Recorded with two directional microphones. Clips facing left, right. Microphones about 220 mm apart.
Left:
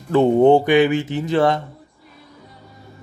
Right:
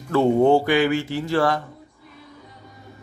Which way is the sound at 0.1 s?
20° left (ahead or behind).